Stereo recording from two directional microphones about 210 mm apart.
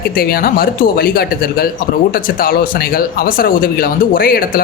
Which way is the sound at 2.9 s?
45° left (ahead or behind).